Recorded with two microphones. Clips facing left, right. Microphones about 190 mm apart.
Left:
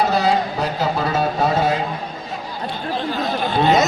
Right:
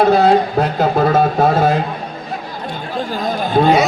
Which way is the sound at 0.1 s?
55° right (ahead or behind).